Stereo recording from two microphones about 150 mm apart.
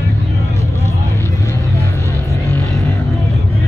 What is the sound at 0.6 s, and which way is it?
Vehicle, 20° left (ahead or behind).